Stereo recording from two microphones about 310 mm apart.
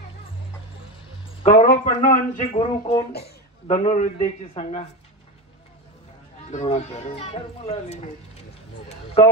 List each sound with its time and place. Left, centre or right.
1.4 s speech: left
3.1 s speech: left
6.5 s speech: left